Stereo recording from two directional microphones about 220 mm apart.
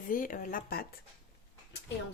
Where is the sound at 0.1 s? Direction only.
40° left (ahead or behind).